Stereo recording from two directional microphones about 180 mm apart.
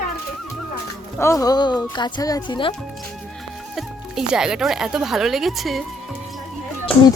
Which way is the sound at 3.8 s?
5° right (ahead or behind).